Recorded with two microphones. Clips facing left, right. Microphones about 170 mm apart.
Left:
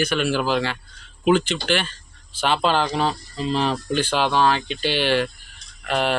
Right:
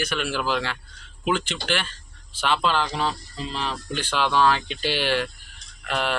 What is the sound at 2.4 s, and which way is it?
Speech, 35° left (ahead or behind).